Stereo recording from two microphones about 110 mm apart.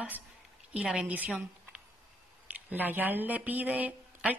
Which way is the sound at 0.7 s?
10° right (ahead or behind).